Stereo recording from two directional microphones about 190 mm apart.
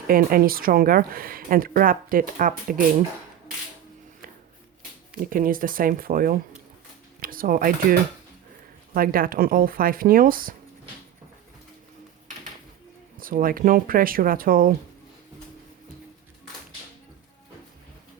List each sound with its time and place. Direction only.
0.1 s speech: 50° right (ahead or behind)
5.1 s speech: 45° right (ahead or behind)
13.1 s speech: 45° right (ahead or behind)